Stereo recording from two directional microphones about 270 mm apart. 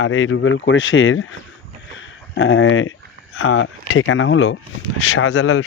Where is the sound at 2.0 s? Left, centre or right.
Left.